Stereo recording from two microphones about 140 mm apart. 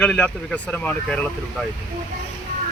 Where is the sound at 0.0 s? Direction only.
5° left (ahead or behind).